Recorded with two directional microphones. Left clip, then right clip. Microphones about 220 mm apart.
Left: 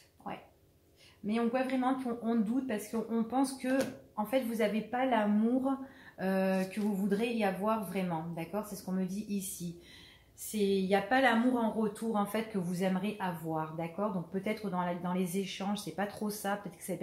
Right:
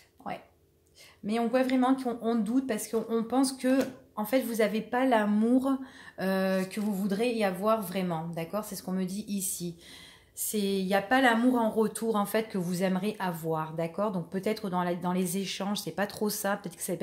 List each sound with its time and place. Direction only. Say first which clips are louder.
1.2 s speech: right 5 dB; 45° right (ahead or behind)
10.5 s speech: right 1 dB; 50° right (ahead or behind)